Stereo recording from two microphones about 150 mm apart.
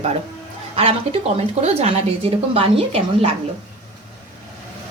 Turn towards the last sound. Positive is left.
turn(degrees=-40)  # may be behind; listen again after turning